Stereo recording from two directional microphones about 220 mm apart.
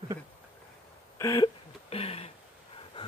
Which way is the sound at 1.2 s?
15° left (ahead or behind).